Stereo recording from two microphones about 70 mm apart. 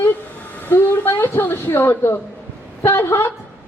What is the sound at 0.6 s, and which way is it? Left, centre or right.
Speech, left.